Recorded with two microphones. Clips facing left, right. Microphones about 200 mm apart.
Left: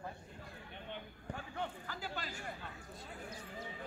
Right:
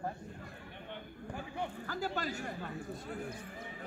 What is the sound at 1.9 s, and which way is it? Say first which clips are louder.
Speech: right 8 dB; 45° right (ahead or behind).